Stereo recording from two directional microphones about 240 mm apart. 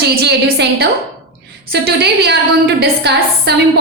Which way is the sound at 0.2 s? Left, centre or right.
Right.